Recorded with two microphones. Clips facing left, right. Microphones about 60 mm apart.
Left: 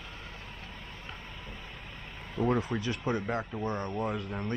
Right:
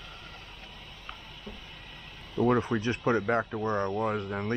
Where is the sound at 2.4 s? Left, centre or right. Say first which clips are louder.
Right 4 dB; centre.